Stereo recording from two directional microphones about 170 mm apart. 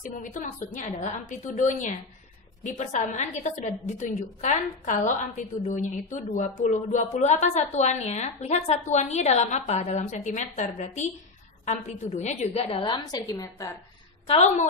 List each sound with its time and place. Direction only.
0.0 s a woman's voice: 50° left (ahead or behind); by 13.7 s 15° left (ahead or behind)
14.2 s a woman's voice: 35° left (ahead or behind)